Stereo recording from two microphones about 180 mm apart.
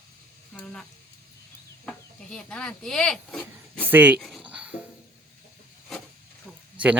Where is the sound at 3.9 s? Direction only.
10° right (ahead or behind).